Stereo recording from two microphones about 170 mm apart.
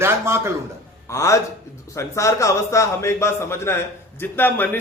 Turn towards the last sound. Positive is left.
turn(degrees=10)  # may be behind; listen again after turning